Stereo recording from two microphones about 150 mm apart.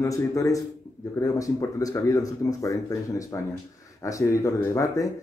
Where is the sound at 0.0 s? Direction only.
20° left (ahead or behind).